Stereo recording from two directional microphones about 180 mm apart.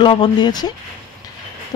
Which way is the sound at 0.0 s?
25° left (ahead or behind).